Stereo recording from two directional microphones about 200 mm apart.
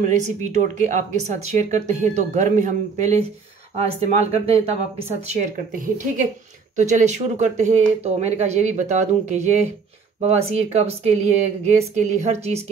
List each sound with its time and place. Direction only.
0.0 s speech: 35° right (ahead or behind)
5.8 s speech: 40° right (ahead or behind)